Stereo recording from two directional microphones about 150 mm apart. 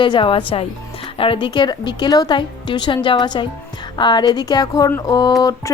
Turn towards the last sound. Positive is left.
turn(degrees=25)  # may be behind; listen again after turning